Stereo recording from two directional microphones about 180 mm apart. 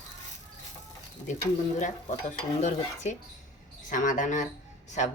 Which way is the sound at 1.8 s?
40° left (ahead or behind).